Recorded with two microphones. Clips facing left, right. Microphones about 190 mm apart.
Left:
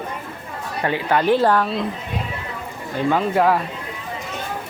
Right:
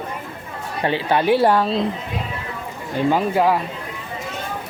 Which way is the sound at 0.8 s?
25° right (ahead or behind).